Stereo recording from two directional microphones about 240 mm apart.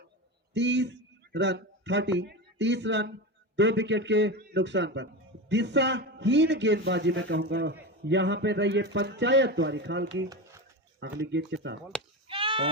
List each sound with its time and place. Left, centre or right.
0.5 s a man's voice: right
12.3 s sheep: right